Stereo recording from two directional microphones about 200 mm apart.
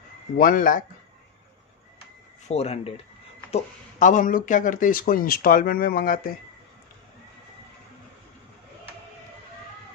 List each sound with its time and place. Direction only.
0.4 s speech: 45° left (ahead or behind)
2.4 s speech: 30° left (ahead or behind)